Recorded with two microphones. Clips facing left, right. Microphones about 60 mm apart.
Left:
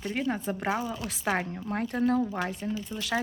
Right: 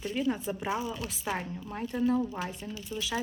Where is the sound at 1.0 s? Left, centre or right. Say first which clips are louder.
Left 5 dB; left.